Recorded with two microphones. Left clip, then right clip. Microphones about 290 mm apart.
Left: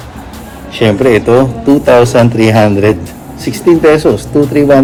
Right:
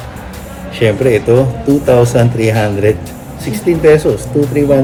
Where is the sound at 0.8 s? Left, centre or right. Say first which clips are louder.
Left 3 dB; left.